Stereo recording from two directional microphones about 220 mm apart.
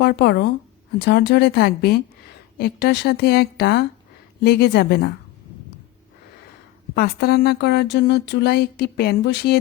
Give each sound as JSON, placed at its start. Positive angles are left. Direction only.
{"t": 0.0, "sound": "speech", "side_deg": 50}
{"t": 6.9, "sound": "speech", "side_deg": 45}